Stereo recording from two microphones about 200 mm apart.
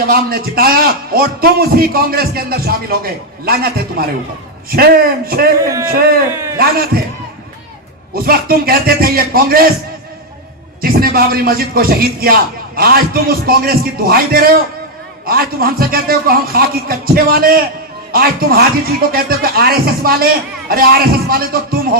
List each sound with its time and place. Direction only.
0.1 s a man's voice: 50° right (ahead or behind)
6.3 s a sound: 15° right (ahead or behind)
6.6 s a man's voice: 50° right (ahead or behind)
8.1 s a man's voice: 50° right (ahead or behind)
10.8 s a man's voice: 50° right (ahead or behind)